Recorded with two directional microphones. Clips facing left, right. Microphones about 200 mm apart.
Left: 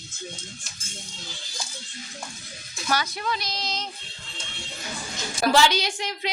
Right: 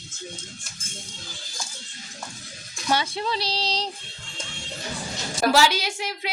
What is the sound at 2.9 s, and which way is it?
Speech, 25° right (ahead or behind).